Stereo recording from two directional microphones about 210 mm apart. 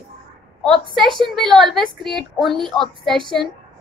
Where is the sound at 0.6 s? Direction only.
5° left (ahead or behind).